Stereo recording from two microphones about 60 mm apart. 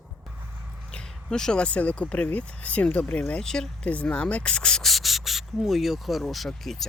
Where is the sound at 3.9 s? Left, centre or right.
Left.